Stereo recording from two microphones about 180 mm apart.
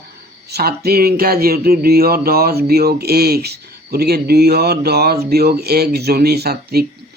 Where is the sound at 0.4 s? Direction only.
60° right (ahead or behind).